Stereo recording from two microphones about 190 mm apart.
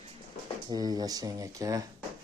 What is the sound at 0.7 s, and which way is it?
Speech, 20° right (ahead or behind).